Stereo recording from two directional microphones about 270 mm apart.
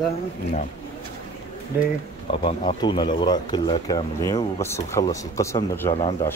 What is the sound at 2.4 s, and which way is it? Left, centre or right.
Speech, centre.